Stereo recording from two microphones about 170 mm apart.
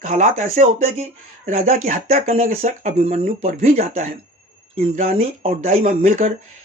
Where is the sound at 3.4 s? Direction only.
50° right (ahead or behind).